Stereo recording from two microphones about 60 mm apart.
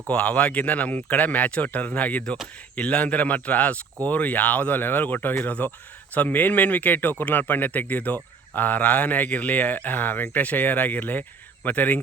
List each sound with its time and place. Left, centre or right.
0.1 s speech: left